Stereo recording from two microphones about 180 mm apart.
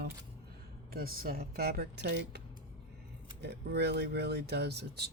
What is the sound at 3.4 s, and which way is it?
Speech, 65° right (ahead or behind).